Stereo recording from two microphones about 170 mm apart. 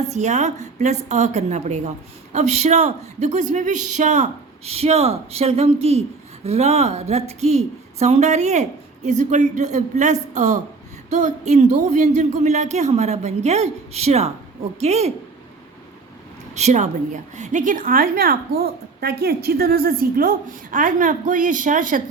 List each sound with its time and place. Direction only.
0.1 s a woman's voice: 45° right (ahead or behind)
16.6 s a woman's voice: 45° right (ahead or behind)